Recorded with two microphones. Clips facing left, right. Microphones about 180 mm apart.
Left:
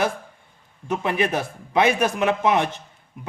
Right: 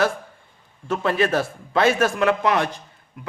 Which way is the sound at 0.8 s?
20° left (ahead or behind).